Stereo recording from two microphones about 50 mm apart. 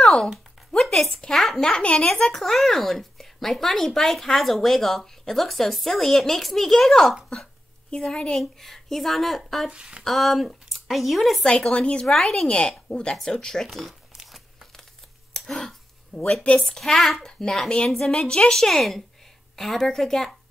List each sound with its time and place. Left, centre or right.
0.0 s a sound: centre
0.7 s a woman's voice: centre
1.6 s a woman's voice: centre
2.4 s speech: centre
7.9 s a woman's voice: centre
8.4 s speech: centre
9.7 s speech: centre
10.0 s speech: centre
11.4 s speech: centre
12.1 s a woman's voice: centre
12.5 s a woman's voice: left
13.7 s speech: centre
15.3 s a sound: centre
16.1 s a woman's voice: centre